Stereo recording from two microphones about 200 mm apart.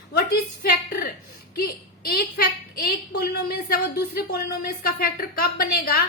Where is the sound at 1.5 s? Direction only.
50° left (ahead or behind).